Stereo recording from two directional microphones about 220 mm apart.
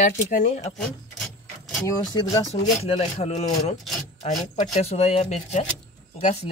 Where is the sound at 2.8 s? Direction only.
30° left (ahead or behind).